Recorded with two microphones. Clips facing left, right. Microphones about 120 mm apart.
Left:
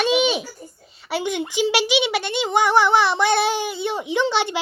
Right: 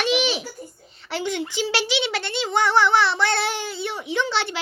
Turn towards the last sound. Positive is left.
turn(degrees=15)  # may be behind; listen again after turning